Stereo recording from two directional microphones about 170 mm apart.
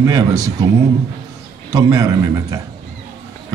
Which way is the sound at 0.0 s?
20° right (ahead or behind).